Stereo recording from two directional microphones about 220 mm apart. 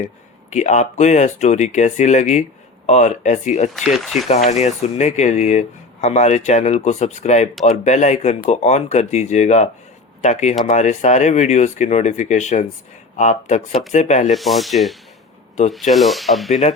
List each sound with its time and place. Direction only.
0.5 s speech: 30° left (ahead or behind)
3.8 s speech: centre (ahead or behind)
4.4 s speech: 30° left (ahead or behind)
10.7 s speech: 30° left (ahead or behind)
14.3 s speech: centre (ahead or behind)
16.5 s speech: 30° left (ahead or behind)